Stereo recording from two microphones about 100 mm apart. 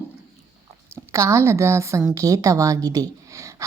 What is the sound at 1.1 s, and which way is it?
A woman's voice, 30° right (ahead or behind).